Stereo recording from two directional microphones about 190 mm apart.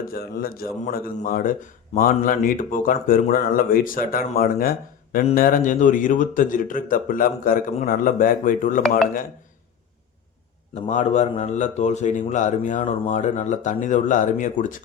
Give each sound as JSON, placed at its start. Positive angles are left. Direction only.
{"t": 0.1, "sound": "a man's voice", "side_deg": 50}
{"t": 10.8, "sound": "speech", "side_deg": 40}